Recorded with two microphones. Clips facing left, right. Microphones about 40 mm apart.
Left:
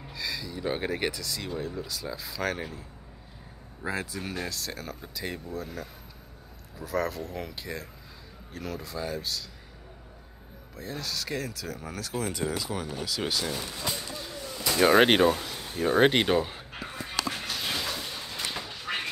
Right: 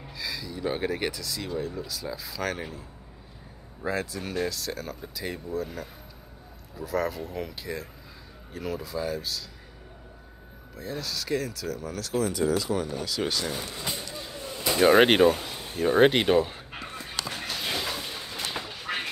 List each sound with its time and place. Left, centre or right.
0.1 s speech: centre
3.8 s speech: centre
10.8 s speech: centre
11.8 s speech: centre
12.2 s speech: left
12.6 s speech: centre
13.5 s a sound: centre
14.8 s speech: centre
16.7 s a sound: centre